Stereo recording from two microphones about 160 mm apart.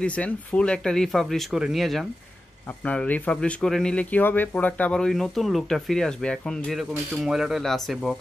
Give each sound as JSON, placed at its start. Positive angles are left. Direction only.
{"t": 0.0, "sound": "speech", "side_deg": 10}